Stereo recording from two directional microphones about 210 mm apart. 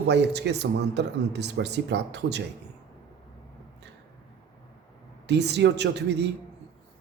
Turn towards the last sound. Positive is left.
turn(degrees=-55)  # may be behind; listen again after turning